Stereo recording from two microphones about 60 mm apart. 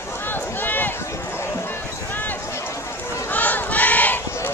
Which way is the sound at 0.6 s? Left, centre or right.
Left.